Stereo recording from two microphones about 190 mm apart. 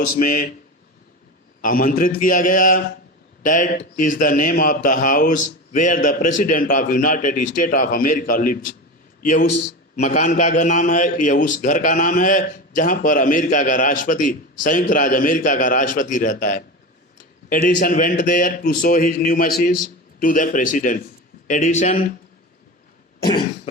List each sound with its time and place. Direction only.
0.2 s a man's voice: 45° left (ahead or behind)
1.6 s a man's voice: 45° left (ahead or behind)